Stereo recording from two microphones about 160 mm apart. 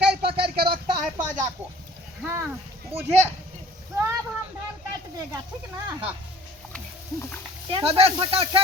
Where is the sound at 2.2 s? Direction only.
10° right (ahead or behind).